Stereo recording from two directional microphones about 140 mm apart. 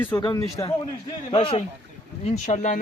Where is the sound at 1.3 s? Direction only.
40° left (ahead or behind).